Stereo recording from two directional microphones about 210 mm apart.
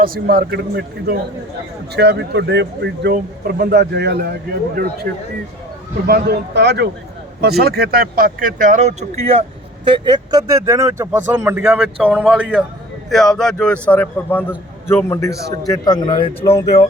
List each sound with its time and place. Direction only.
0.0 s speech: 45° right (ahead or behind)
6.1 s speech: 50° right (ahead or behind); by 9.0 s 35° right (ahead or behind)
9.8 s a man's voice: 20° right (ahead or behind); by 16.6 s 25° left (ahead or behind)